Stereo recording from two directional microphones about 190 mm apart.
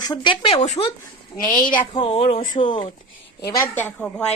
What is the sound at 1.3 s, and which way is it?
A woman's voice, 20° left (ahead or behind).